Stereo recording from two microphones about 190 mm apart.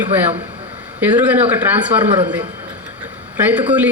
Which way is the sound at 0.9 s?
10° right (ahead or behind).